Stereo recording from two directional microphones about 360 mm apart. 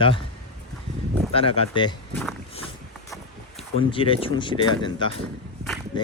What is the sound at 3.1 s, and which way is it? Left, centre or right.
Vehicle, centre.